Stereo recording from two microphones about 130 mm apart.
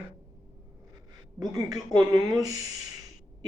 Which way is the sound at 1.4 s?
30° right (ahead or behind).